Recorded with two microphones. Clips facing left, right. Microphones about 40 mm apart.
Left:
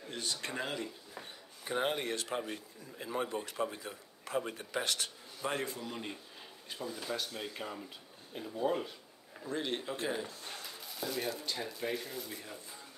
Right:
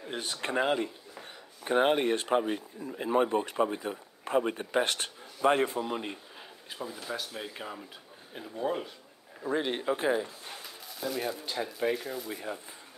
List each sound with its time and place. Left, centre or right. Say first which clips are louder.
0.1 s a man's voice: right 7 dB; right
1.6 s a man's voice: right 9 dB; right
6.7 s speech: right 2 dB; centre
9.5 s speech: right 7 dB; right
10.9 s speech: right 4 dB; centre